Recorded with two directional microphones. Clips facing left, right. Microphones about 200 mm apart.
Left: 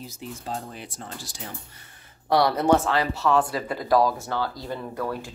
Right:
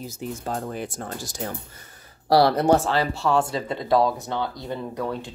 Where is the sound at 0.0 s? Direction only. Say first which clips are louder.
Right 5 dB; 45° right (ahead or behind).